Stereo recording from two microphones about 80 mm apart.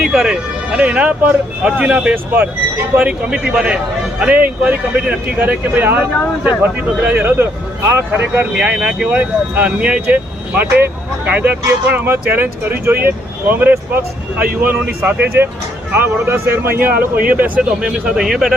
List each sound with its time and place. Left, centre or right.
0.1 s speech: centre; by 8.4 s right
8.5 s speech: centre